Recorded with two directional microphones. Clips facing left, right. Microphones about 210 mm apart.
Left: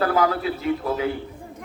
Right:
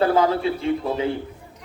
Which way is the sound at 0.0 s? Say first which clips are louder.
Right 2 dB; 25° right (ahead or behind).